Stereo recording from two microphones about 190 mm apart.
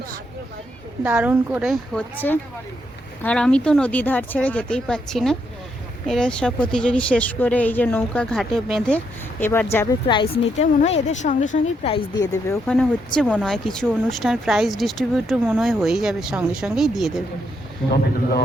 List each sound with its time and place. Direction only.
1.0 s a woman's voice: 5° right (ahead or behind); by 9.6 s 10° left (ahead or behind)
10.6 s speech: 35° left (ahead or behind)
11.9 s a woman's voice: 25° left (ahead or behind)
12.6 s a woman's voice: 5° left (ahead or behind)
17.9 s speech: 55° left (ahead or behind)